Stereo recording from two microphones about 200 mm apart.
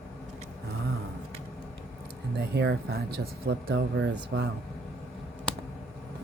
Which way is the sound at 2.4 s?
55° right (ahead or behind).